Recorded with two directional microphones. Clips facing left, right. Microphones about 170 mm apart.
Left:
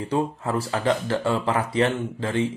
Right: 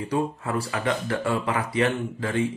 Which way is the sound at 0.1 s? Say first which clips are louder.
Left 2 dB; 30° left (ahead or behind).